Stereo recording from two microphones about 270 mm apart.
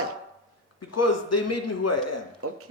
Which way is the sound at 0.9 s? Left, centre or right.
Left.